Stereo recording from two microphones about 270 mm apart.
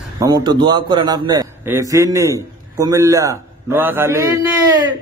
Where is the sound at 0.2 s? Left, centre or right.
Centre.